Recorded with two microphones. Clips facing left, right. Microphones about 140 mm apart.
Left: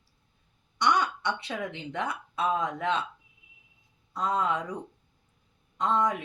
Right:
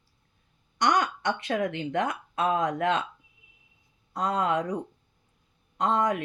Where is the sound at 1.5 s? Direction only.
50° right (ahead or behind).